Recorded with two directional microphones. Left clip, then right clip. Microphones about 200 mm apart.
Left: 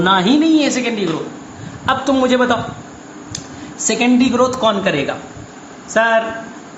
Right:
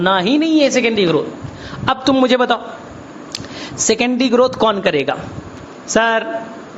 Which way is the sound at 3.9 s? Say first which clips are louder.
Even; 45° right (ahead or behind).